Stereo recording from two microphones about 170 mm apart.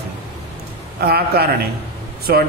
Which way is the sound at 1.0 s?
65° right (ahead or behind).